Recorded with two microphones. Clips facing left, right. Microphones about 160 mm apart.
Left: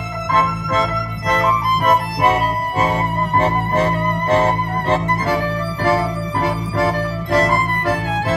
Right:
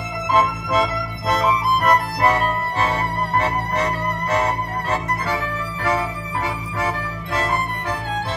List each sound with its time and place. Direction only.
0.3 s music: 10° right (ahead or behind)
5.9 s music: 70° left (ahead or behind)